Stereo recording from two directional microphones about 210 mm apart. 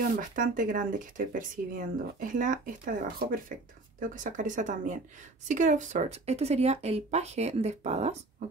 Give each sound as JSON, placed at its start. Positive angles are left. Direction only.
{"t": 0.4, "sound": "speech", "side_deg": -40}